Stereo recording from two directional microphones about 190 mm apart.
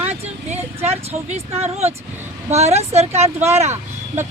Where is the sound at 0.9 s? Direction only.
35° right (ahead or behind).